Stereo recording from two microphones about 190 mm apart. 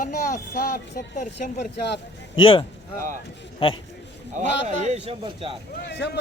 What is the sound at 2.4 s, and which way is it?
Speech, 30° left (ahead or behind).